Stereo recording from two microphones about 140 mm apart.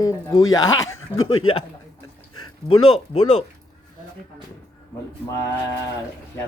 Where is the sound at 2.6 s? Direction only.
20° right (ahead or behind).